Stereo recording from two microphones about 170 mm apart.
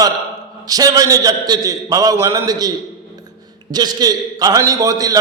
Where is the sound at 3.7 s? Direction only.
25° right (ahead or behind).